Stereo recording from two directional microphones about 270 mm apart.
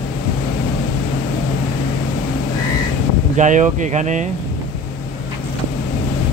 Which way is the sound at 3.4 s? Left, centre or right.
Right.